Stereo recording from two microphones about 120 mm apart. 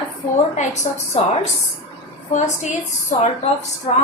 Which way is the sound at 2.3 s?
80° left.